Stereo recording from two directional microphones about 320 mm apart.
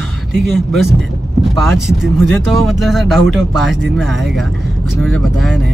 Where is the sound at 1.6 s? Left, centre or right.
Centre.